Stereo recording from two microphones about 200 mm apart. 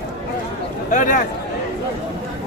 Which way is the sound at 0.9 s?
40° left (ahead or behind).